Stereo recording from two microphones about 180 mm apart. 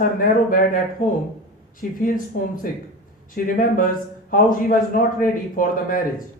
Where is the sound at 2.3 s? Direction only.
50° left (ahead or behind).